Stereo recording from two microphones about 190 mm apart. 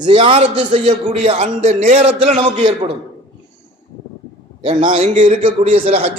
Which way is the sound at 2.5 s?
25° right (ahead or behind).